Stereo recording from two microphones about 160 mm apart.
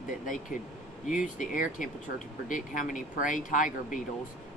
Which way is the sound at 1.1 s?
55° left (ahead or behind).